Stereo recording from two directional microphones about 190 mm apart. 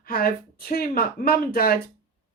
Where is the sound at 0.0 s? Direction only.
50° left (ahead or behind).